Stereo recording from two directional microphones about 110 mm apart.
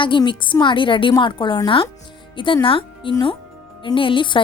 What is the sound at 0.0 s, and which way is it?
A woman's voice, 50° left (ahead or behind).